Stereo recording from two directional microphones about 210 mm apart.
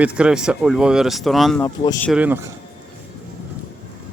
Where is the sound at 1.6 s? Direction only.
20° left (ahead or behind).